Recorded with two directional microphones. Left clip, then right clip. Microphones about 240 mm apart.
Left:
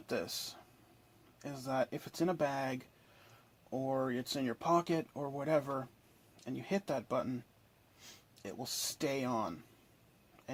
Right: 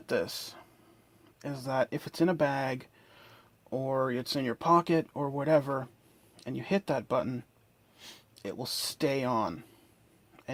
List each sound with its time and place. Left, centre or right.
0.0 s speech: right